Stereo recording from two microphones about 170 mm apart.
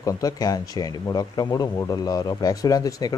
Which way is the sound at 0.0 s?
20° left (ahead or behind).